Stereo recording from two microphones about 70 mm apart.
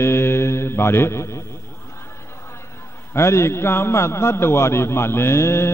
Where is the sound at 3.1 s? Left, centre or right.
Left.